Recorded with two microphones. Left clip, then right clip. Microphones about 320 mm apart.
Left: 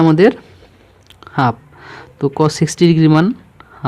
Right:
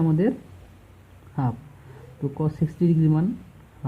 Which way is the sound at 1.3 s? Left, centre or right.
Left.